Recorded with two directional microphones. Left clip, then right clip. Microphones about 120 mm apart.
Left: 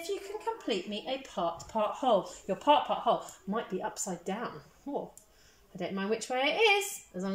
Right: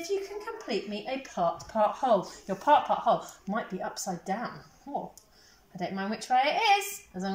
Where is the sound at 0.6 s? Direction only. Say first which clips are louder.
Right 1 dB; 25° left (ahead or behind).